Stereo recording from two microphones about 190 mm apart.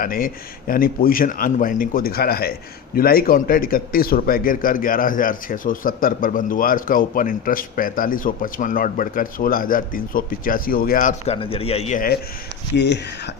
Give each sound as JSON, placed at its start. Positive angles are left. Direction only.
{"t": 0.0, "sound": "a man's voice", "side_deg": 45}
{"t": 11.3, "sound": "speech", "side_deg": 30}
{"t": 12.7, "sound": "speech", "side_deg": 65}